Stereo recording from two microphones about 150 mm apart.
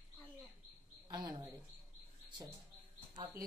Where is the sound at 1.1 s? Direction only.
25° right (ahead or behind).